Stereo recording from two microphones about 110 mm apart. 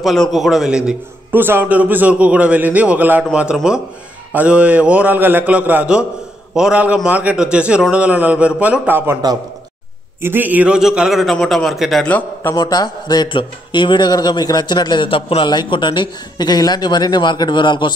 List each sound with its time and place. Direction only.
0.0 s a man's voice: centre (ahead or behind)
1.3 s a man's voice: 20° right (ahead or behind)
10.2 s a man's voice: 20° right (ahead or behind); by 12.1 s centre (ahead or behind)
12.5 s speech: 40° left (ahead or behind)